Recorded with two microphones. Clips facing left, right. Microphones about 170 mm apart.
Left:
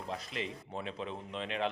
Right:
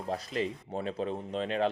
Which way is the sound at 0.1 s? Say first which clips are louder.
Right 8 dB; 40° right (ahead or behind).